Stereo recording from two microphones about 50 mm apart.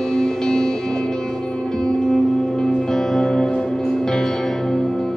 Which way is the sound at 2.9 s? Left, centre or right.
Centre.